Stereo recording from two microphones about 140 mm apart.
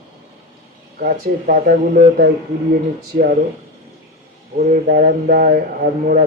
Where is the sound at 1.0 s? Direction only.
90° right.